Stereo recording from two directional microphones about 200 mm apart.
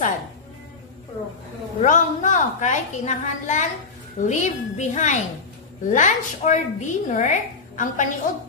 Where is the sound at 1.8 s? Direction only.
40° left (ahead or behind).